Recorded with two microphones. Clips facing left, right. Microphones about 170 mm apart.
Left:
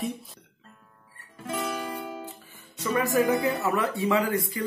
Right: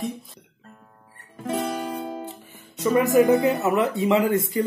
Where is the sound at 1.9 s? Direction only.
35° right (ahead or behind).